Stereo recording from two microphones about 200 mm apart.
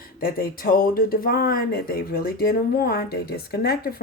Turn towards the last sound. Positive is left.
turn(degrees=50)  # may be behind; listen again after turning